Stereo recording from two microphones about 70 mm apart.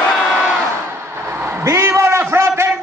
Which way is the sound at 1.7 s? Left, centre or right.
Right.